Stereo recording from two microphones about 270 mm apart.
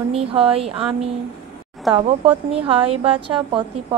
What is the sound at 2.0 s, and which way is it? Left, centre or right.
A woman's voice, right.